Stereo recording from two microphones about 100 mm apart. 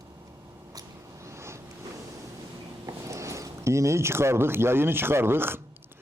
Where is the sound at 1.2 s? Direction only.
30° right (ahead or behind).